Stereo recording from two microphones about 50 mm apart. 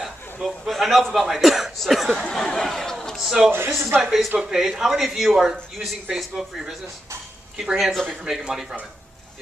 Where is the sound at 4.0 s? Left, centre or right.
Centre.